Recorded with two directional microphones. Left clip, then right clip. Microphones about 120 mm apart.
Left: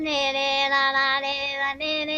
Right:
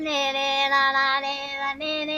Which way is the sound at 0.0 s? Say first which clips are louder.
Even; 15° left (ahead or behind).